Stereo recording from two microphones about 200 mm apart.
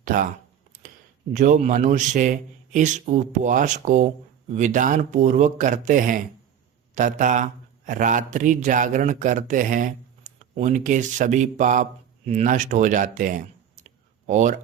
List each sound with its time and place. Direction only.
0.0 s speech: 45° right (ahead or behind)
1.3 s a man's voice: 40° right (ahead or behind)